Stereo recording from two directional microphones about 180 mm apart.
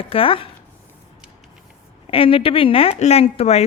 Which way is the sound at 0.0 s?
30° left (ahead or behind).